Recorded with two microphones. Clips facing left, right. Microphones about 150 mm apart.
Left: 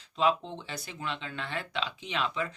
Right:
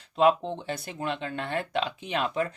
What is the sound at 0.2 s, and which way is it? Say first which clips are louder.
Speech: right 5 dB; 55° right (ahead or behind).